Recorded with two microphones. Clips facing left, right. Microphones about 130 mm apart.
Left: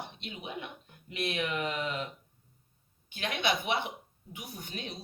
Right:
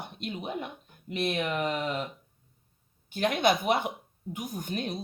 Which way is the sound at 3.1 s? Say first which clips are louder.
Right 7 dB; 40° right (ahead or behind).